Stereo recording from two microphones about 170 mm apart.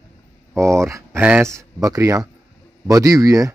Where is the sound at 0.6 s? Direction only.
15° right (ahead or behind).